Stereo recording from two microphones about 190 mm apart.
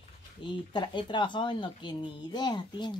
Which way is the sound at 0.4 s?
25° left (ahead or behind).